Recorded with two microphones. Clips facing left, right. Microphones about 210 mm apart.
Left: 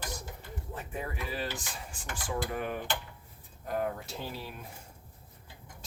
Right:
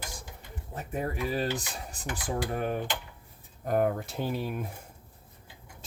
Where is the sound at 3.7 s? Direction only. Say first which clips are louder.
Right 6 dB; 55° right (ahead or behind).